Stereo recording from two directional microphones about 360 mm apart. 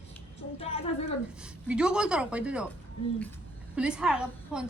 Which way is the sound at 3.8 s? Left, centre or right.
Centre.